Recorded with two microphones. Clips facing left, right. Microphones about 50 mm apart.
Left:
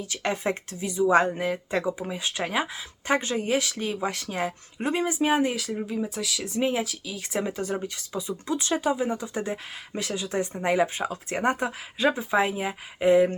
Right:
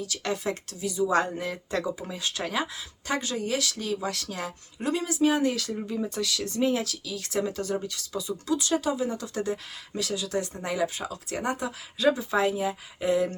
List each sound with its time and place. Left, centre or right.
0.0 s speech: left